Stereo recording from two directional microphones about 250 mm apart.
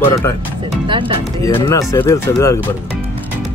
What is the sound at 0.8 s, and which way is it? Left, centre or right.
Speech, centre.